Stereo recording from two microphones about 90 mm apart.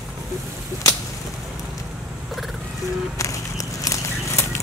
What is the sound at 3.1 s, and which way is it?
Walk, 35° left (ahead or behind).